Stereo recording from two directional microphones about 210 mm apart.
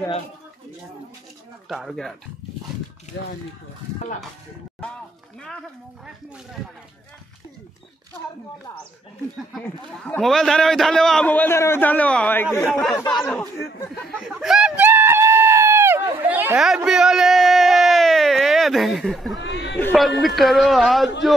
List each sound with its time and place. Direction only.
1.7 s a man's voice: centre (ahead or behind)
9.9 s a man's voice: 5° left (ahead or behind)
13.8 s screaming: centre (ahead or behind)
19.3 s a sound: 60° left (ahead or behind)
19.8 s a man's voice: 5° left (ahead or behind)